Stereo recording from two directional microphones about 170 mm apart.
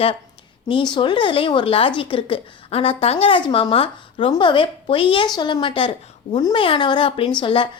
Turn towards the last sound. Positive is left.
turn(degrees=30)  # may be behind; listen again after turning